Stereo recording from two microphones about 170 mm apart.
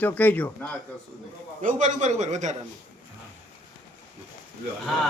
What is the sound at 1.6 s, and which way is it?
Speech, 50° right (ahead or behind).